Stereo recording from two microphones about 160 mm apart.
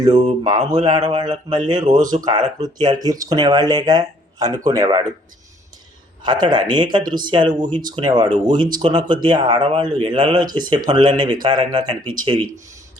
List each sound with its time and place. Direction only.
0.0 s speech: 30° right (ahead or behind)
6.4 s speech: 30° right (ahead or behind)